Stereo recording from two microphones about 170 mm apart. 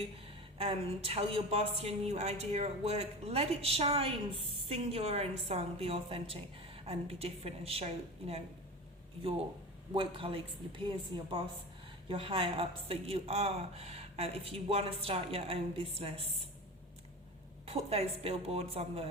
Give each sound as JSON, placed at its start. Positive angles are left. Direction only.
{"t": 0.6, "sound": "a woman's voice", "side_deg": -35}
{"t": 9.9, "sound": "a woman's voice", "side_deg": -30}
{"t": 17.7, "sound": "a woman's voice", "side_deg": -35}